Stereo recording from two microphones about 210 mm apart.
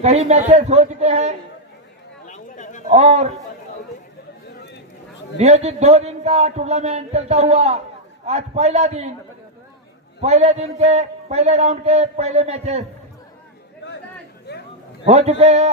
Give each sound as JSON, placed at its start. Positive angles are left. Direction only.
{"t": 0.0, "sound": "a man's voice", "side_deg": -30}
{"t": 2.2, "sound": "a sound", "side_deg": 35}
{"t": 2.9, "sound": "a man's voice", "side_deg": -30}
{"t": 5.4, "sound": "a man's voice", "side_deg": -30}
{"t": 10.2, "sound": "a man's voice", "side_deg": -30}
{"t": 14.5, "sound": "a sound", "side_deg": 50}
{"t": 15.0, "sound": "a man's voice", "side_deg": -30}